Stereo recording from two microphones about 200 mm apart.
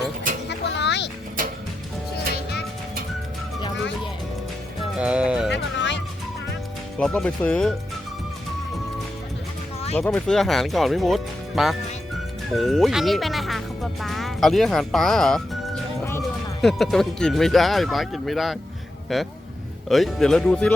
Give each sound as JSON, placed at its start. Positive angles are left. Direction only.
{"t": 0.4, "sound": "vehicle", "side_deg": 60}
{"t": 2.3, "sound": "music", "side_deg": 55}
{"t": 4.9, "sound": "music", "side_deg": -5}
{"t": 5.5, "sound": "music", "side_deg": 65}
{"t": 7.0, "sound": "speech", "side_deg": 5}
{"t": 10.0, "sound": "speech", "side_deg": 5}